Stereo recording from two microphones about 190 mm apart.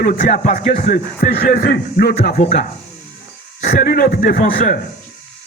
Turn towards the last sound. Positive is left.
turn(degrees=50)  # may be behind; listen again after turning